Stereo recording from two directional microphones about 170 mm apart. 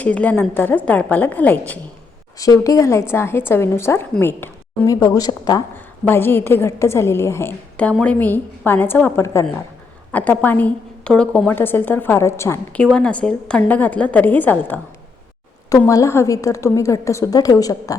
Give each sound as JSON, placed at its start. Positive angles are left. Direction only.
{"t": 0.0, "sound": "a woman's voice", "side_deg": 10}
{"t": 2.4, "sound": "a woman's voice", "side_deg": 20}
{"t": 15.9, "sound": "a woman's voice", "side_deg": 15}